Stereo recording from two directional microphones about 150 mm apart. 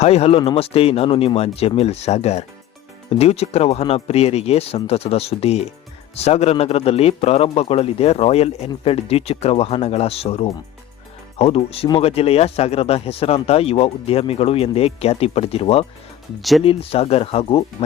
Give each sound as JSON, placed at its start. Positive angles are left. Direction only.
{"t": 0.0, "sound": "a man's voice", "side_deg": 45}
{"t": 16.4, "sound": "speech", "side_deg": 0}
{"t": 16.6, "sound": "speech", "side_deg": 40}